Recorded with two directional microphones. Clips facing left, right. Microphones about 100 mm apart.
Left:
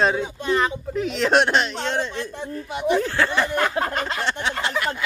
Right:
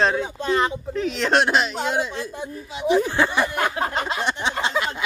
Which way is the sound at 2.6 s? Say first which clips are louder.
Left 1 dB; 60° left (ahead or behind).